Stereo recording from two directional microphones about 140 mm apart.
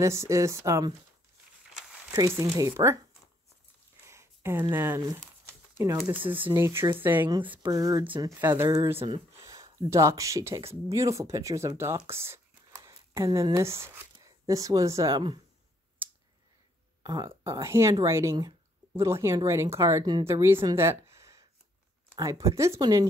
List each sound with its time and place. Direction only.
0.0 s speech: 20° right (ahead or behind)
2.1 s speech: 20° right (ahead or behind)
4.0 s a sound: 20° right (ahead or behind)
4.7 s speech: 20° right (ahead or behind)
6.5 s speech: 20° right (ahead or behind)
7.2 s a woman's voice: 35° right (ahead or behind); by 8.6 s 15° right (ahead or behind)
8.6 s speech: 25° right (ahead or behind)
12.2 s a sound: 20° right (ahead or behind)
14.4 s speech: 25° right (ahead or behind)
17.0 s speech: 25° right (ahead or behind)